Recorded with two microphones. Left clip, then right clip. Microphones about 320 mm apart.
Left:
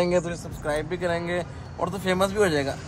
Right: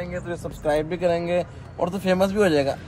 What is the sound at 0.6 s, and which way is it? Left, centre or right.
A man's voice, centre.